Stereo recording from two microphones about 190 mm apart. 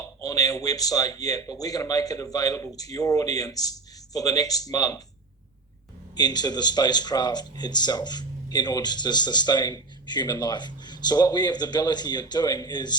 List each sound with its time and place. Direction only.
0.2 s speech: 20° left (ahead or behind)
6.1 s speech: 20° left (ahead or behind)